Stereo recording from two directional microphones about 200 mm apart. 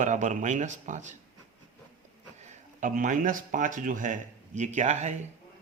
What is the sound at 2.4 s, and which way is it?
Speech, 40° right (ahead or behind).